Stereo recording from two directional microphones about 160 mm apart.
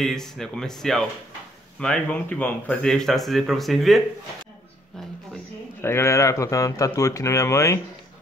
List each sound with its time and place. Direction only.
0.0 s speech: 5° left (ahead or behind)
5.3 s speech: 15° left (ahead or behind)